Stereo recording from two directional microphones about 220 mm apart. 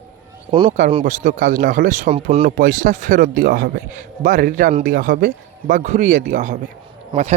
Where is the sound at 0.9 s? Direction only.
35° right (ahead or behind).